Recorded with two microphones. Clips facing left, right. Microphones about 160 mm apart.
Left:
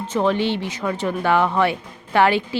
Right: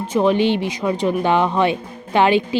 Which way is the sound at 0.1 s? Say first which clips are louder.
Right 4 dB; 15° right (ahead or behind).